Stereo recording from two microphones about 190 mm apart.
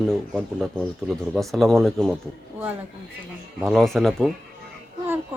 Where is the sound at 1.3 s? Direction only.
Centre (ahead or behind).